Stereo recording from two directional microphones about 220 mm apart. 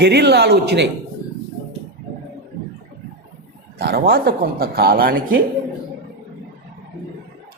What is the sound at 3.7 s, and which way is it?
A man's voice, 45° right (ahead or behind).